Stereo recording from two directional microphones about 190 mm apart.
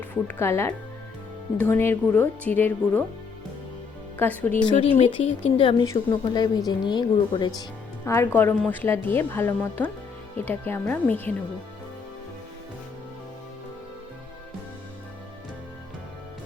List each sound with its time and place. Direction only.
0.1 s a woman's voice: 15° left (ahead or behind)
4.2 s a woman's voice: 10° left (ahead or behind)
4.9 s a woman's voice: 35° left (ahead or behind); by 11.3 s 10° left (ahead or behind)